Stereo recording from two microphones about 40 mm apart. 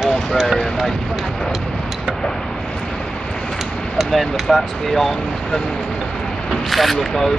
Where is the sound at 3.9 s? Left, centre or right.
Centre.